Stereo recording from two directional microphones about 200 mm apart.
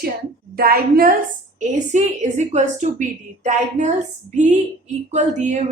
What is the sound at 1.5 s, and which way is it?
A woman's voice, 40° right (ahead or behind).